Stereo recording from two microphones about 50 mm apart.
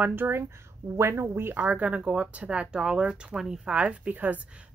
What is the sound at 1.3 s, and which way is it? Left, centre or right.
Speech, right.